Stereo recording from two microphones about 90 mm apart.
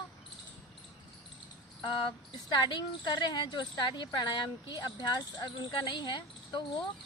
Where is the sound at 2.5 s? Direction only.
55° left (ahead or behind).